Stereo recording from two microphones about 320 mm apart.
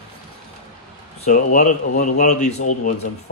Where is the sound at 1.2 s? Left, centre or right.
Left.